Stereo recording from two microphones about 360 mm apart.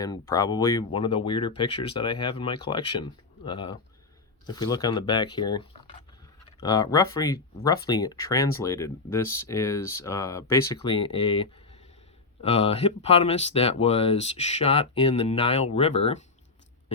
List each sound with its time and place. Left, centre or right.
0.0 s speech: centre